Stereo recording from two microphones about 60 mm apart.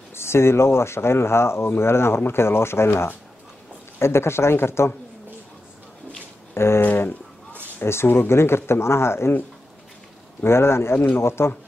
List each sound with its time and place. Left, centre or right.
0.1 s speech: left
6.5 s a sound: left
6.9 s speech: left
7.8 s speech: left
10.4 s speech: left